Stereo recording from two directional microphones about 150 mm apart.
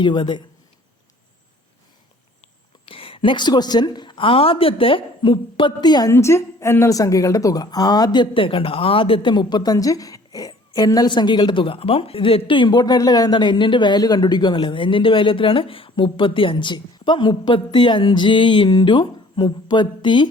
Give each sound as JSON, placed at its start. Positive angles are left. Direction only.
{"t": 0.0, "sound": "a woman's voice", "side_deg": 30}
{"t": 2.9, "sound": "a woman's voice", "side_deg": 35}